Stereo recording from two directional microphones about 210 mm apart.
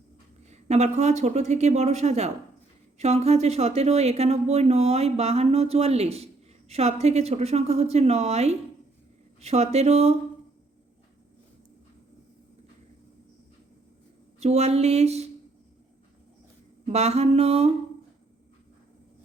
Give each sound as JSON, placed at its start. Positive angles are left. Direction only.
{"t": 0.5, "sound": "speech", "side_deg": -30}
{"t": 14.3, "sound": "speech", "side_deg": -30}
{"t": 16.8, "sound": "a sound", "side_deg": -30}